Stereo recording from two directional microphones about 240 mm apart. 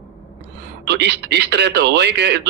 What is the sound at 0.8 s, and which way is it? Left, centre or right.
A man's voice, right.